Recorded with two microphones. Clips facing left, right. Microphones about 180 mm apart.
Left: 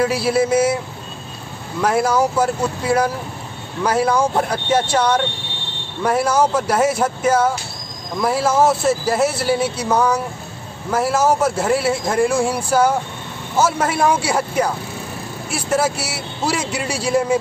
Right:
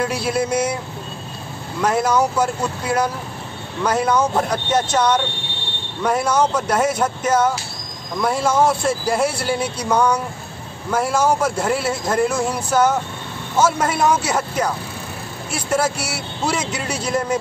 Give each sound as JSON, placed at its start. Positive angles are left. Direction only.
{"t": 0.0, "sound": "a man's voice", "side_deg": 5}
{"t": 1.8, "sound": "a man's voice", "side_deg": 10}